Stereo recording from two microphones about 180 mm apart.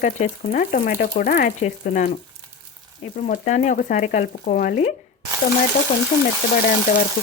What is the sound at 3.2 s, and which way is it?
Speech, 45° left (ahead or behind).